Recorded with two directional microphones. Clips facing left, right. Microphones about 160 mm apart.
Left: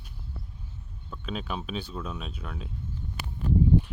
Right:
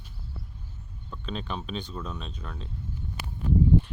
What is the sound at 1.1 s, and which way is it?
Speech, 5° left (ahead or behind).